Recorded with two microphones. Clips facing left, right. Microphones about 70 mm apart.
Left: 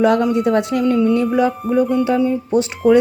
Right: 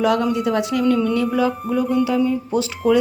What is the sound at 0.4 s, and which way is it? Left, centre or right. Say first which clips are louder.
Speech: left 2 dB; left.